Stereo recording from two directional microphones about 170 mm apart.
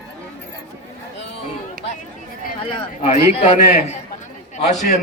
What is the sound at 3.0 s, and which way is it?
Speech, 40° left (ahead or behind).